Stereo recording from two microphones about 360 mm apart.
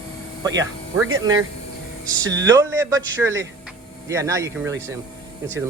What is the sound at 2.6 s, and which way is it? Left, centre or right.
A man's voice, centre.